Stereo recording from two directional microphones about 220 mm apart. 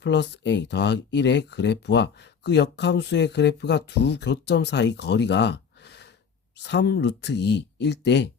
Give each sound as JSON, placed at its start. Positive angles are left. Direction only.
{"t": 0.0, "sound": "speech", "side_deg": 50}